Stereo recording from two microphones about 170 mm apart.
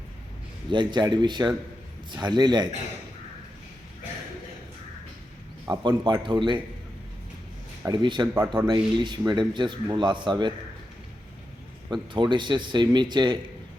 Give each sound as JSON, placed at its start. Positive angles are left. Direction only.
{"t": 0.7, "sound": "a man's voice", "side_deg": -25}
{"t": 5.6, "sound": "a man's voice", "side_deg": -20}
{"t": 7.9, "sound": "a man's voice", "side_deg": -25}
{"t": 8.3, "sound": "a man's voice", "side_deg": -10}
{"t": 8.6, "sound": "a man's voice", "side_deg": -25}
{"t": 12.1, "sound": "a man's voice", "side_deg": -25}